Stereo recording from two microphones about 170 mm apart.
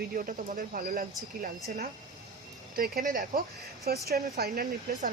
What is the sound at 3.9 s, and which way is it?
Speech, 65° right (ahead or behind).